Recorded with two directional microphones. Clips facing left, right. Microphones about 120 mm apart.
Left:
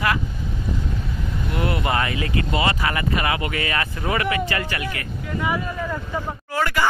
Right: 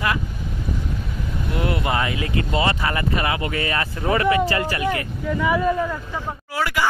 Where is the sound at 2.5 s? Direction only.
15° left (ahead or behind).